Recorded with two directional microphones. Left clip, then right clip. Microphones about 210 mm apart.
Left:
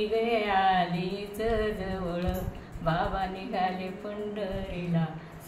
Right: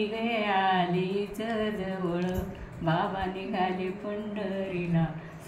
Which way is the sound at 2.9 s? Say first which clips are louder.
Even; 15° left (ahead or behind).